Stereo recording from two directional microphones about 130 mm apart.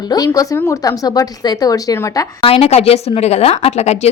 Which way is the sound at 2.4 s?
50° left (ahead or behind).